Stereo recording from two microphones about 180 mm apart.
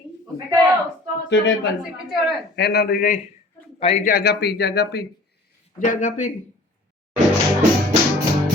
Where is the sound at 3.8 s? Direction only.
40° left (ahead or behind); by 5.1 s 65° left (ahead or behind).